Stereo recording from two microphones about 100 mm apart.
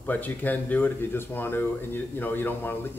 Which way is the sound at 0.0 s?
15° left (ahead or behind).